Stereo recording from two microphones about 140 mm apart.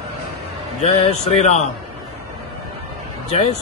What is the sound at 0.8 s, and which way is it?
Speech, 50° left (ahead or behind).